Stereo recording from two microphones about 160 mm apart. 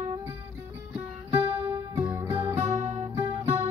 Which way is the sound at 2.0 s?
15° right (ahead or behind).